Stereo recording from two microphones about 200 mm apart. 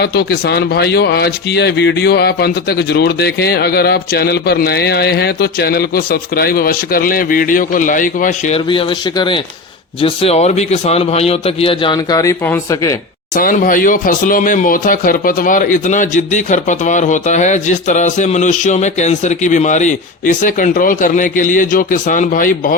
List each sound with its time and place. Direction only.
0.0 s a man's voice: 55° left (ahead or behind)
8.5 s a man's voice: 25° left (ahead or behind)
13.3 s speech: 45° left (ahead or behind)